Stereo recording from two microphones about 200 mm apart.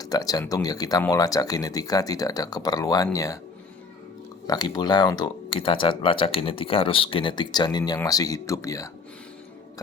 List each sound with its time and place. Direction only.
0.0 s speech: 20° left (ahead or behind)
4.4 s speech: 20° left (ahead or behind)